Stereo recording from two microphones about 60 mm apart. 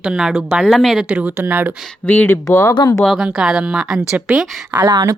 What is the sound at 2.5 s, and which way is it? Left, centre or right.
Speech, left.